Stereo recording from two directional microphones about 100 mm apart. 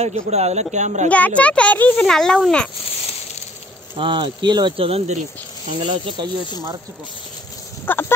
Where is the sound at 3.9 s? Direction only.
55° right (ahead or behind).